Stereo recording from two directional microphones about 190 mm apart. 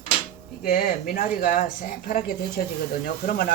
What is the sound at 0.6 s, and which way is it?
Speech, 50° left (ahead or behind).